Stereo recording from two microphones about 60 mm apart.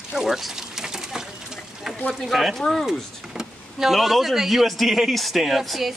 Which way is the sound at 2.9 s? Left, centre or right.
Centre.